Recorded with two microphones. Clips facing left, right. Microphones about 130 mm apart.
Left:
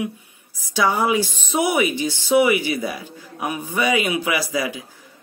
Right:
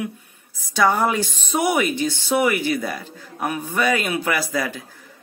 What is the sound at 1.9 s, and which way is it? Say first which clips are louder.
Speech: right 1 dB; 50° right (ahead or behind).